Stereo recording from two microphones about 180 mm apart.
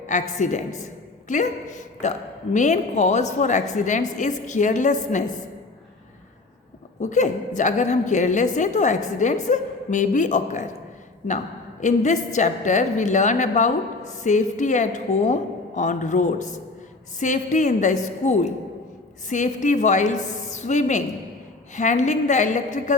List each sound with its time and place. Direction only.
0.1 s a woman's voice: 45° left (ahead or behind)
7.0 s a woman's voice: 40° left (ahead or behind)